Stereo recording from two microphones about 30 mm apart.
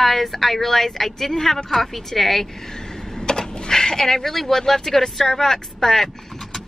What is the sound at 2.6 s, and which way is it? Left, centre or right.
A woman's voice, left.